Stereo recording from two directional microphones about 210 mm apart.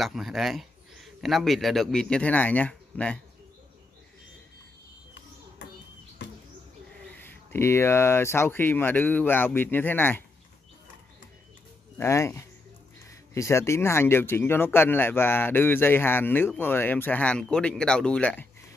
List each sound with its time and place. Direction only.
0.0 s speech: centre (ahead or behind)
7.2 s speech: 10° left (ahead or behind)
12.0 s speech: 15° left (ahead or behind)